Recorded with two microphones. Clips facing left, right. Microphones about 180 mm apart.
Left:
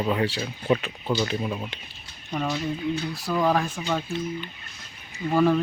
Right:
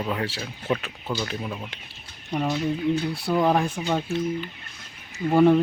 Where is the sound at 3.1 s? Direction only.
25° right (ahead or behind).